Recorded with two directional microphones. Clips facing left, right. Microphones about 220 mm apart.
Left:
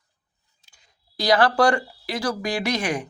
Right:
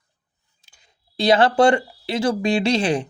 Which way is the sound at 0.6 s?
25° right (ahead or behind).